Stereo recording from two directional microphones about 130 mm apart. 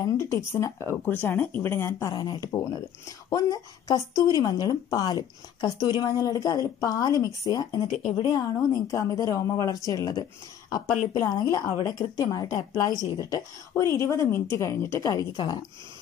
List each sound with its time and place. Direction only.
0.0 s speech: 20° left (ahead or behind)
2.1 s speech: 30° left (ahead or behind)
11.8 s speech: 30° left (ahead or behind)